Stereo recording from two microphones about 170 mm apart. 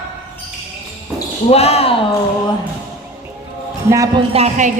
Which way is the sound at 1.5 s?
35° left (ahead or behind).